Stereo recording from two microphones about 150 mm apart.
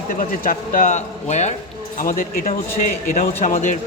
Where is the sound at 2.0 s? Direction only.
70° left (ahead or behind).